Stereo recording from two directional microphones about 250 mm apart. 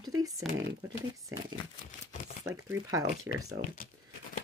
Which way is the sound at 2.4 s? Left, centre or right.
Centre.